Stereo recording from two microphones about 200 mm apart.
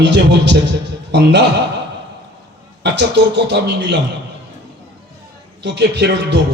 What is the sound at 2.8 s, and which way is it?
A man's voice, 60° right (ahead or behind).